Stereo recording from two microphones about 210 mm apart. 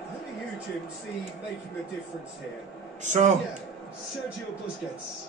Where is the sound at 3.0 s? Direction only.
35° right (ahead or behind).